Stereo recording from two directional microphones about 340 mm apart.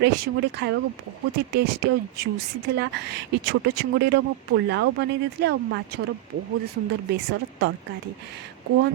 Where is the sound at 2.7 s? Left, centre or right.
Right.